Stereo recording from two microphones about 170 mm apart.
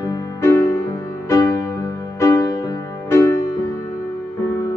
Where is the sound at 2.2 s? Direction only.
20° left (ahead or behind).